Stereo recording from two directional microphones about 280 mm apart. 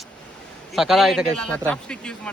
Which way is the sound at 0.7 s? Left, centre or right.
Centre.